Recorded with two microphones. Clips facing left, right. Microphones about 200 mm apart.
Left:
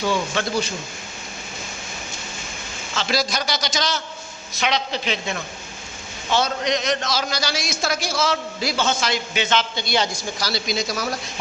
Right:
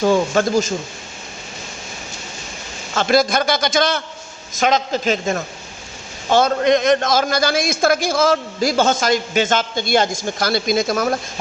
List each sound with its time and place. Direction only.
0.0 s a man's voice: 45° right (ahead or behind)
2.9 s a man's voice: 50° right (ahead or behind)
4.6 s a man's voice: 45° right (ahead or behind)